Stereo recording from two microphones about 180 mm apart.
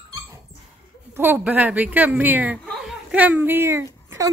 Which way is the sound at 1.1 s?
10° right (ahead or behind).